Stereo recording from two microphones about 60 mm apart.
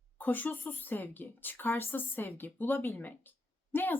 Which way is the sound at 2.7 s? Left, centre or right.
Left.